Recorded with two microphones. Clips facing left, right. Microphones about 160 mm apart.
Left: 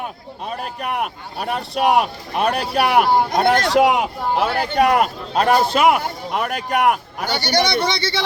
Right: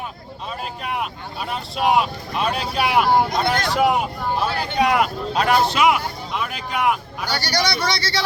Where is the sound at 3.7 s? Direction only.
90° left; by 7.7 s 55° left (ahead or behind).